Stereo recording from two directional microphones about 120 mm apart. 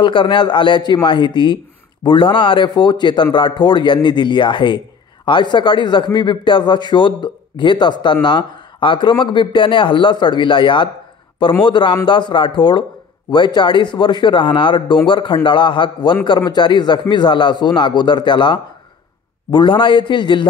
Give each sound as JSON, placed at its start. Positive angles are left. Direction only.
{"t": 0.0, "sound": "a man's voice", "side_deg": 40}